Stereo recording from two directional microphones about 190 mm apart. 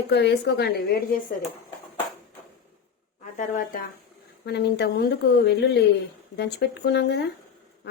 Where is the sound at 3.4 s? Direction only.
45° left (ahead or behind).